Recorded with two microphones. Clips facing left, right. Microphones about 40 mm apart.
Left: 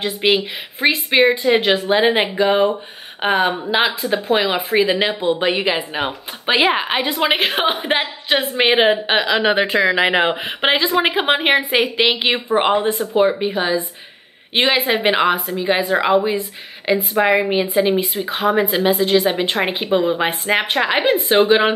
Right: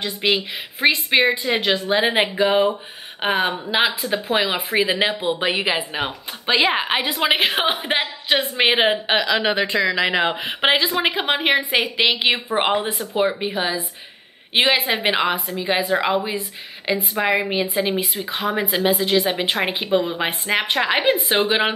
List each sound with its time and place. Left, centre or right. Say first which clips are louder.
0.0 s a woman's voice: left 4 dB; centre
0.7 s a woman's voice: left 2 dB; centre
9.8 s speech: left 4 dB; left
10.3 s a woman's voice: left 1 dB; centre
11.7 s a woman's voice: left 3 dB; centre